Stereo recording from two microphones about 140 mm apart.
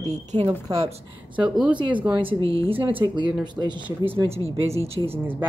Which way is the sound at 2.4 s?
25° left (ahead or behind).